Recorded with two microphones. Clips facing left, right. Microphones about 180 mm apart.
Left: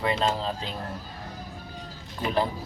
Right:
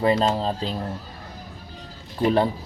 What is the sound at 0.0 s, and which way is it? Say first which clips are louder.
Speech: right 6 dB; 35° right (ahead or behind).